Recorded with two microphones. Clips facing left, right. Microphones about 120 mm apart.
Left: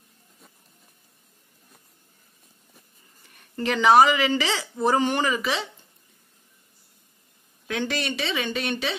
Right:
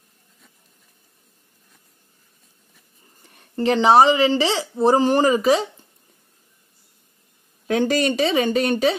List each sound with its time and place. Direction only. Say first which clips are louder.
3.2 s a woman's voice: right 6 dB; 35° right (ahead or behind)
7.6 s speech: right 9 dB; 40° right (ahead or behind)